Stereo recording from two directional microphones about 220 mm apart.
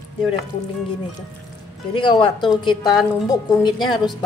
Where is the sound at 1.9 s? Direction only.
20° left (ahead or behind).